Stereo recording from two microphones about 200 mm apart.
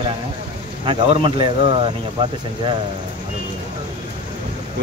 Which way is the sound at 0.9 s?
25° right (ahead or behind).